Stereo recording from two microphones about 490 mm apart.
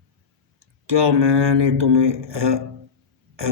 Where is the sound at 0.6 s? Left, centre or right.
Right.